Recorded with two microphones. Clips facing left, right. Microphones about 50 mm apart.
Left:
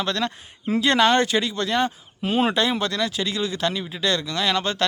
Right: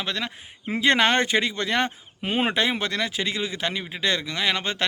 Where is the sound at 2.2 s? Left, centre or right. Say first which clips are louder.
Left 2 dB; right.